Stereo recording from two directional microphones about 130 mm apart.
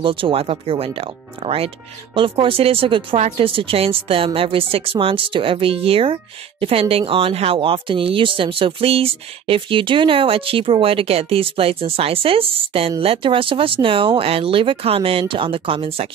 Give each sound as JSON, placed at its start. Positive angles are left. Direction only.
{"t": 0.0, "sound": "speech", "side_deg": -40}